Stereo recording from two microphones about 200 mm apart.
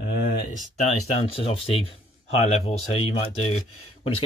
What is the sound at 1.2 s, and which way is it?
Speech, 30° left (ahead or behind).